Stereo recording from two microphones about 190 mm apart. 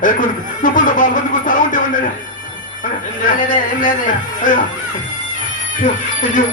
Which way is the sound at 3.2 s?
45° left (ahead or behind).